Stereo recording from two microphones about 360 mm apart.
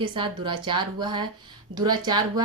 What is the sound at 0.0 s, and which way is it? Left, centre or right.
Speech, centre.